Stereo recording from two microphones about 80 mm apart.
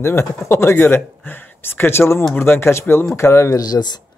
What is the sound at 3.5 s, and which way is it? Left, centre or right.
Speech, left.